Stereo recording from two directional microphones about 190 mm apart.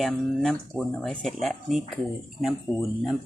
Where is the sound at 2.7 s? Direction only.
25° left (ahead or behind).